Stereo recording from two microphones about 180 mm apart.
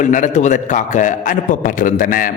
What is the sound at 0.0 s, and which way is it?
A man's voice, 45° left (ahead or behind).